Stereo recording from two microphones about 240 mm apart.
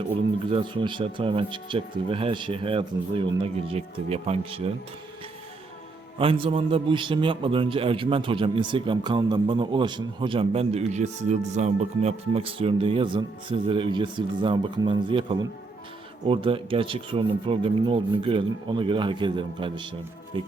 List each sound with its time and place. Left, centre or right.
0.5 s a man's voice: right
6.1 s a man's voice: right